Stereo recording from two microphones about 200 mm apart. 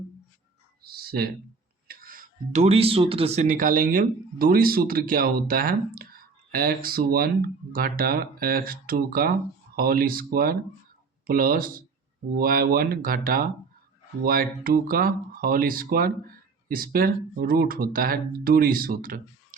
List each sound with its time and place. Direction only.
0.9 s speech: 50° right (ahead or behind)